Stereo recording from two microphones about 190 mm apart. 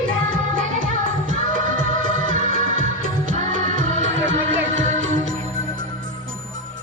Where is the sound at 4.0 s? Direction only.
80° right.